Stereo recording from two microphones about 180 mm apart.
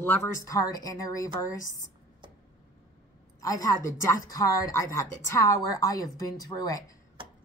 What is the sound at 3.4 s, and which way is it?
A woman's voice, 20° left (ahead or behind).